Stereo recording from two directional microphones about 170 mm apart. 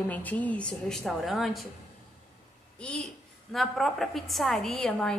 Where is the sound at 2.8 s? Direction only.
5° left (ahead or behind).